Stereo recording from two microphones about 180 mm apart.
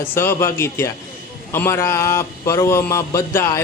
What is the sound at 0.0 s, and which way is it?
A man's voice, 15° left (ahead or behind).